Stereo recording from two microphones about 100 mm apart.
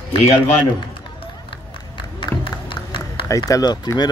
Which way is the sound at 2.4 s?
55° left (ahead or behind).